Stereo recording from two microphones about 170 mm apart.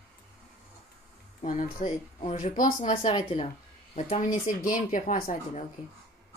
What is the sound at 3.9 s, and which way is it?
Speech, 40° left (ahead or behind).